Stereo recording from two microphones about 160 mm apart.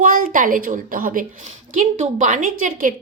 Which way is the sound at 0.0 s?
60° right (ahead or behind).